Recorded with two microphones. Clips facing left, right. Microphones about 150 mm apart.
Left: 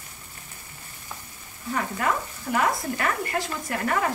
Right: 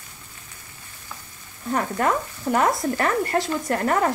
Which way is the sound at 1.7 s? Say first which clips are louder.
Right 4 dB; 40° right (ahead or behind).